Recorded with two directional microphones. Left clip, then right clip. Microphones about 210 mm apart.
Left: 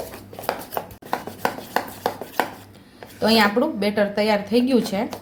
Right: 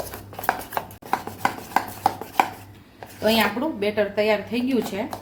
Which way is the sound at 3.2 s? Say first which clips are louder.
Left 3 dB; 30° left (ahead or behind).